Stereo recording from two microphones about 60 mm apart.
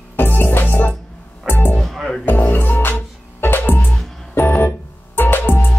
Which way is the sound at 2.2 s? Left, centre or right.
Left.